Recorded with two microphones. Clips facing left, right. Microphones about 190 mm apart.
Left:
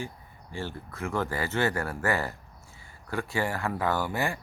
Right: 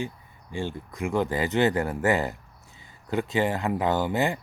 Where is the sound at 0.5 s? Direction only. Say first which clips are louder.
Right 4 dB; 15° right (ahead or behind).